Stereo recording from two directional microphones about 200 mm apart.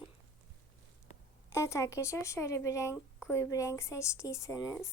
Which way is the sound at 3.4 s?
15° left (ahead or behind).